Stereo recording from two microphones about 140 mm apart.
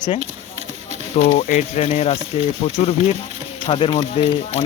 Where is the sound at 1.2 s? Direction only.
65° left (ahead or behind).